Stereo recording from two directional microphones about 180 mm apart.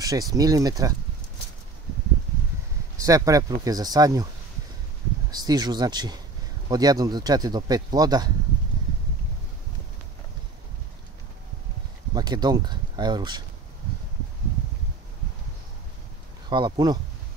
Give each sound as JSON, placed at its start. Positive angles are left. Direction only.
{"t": 0.0, "sound": "speech", "side_deg": -20}
{"t": 3.0, "sound": "speech", "side_deg": -20}
{"t": 5.3, "sound": "speech", "side_deg": -20}
{"t": 12.1, "sound": "speech", "side_deg": -25}
{"t": 16.4, "sound": "speech", "side_deg": -25}